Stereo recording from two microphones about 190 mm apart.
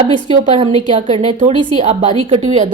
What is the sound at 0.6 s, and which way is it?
A woman's voice, 30° right (ahead or behind).